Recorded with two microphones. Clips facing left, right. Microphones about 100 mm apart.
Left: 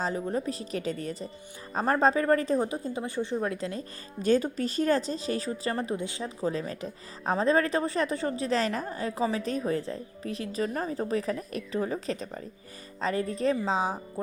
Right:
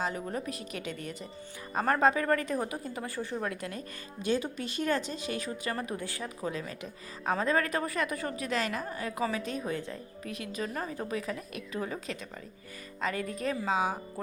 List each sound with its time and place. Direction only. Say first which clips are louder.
0.0 s a woman's voice: left 4 dB; 30° left (ahead or behind)
4.2 s speech: left 6 dB; 40° left (ahead or behind)